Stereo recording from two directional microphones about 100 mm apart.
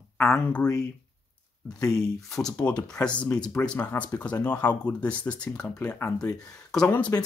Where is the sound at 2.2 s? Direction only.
5° left (ahead or behind).